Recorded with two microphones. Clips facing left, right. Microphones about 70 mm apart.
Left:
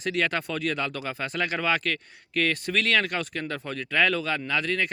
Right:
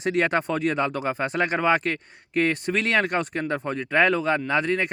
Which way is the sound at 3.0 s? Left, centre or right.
Right.